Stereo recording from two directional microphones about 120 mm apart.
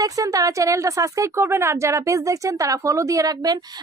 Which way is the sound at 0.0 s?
30° right (ahead or behind).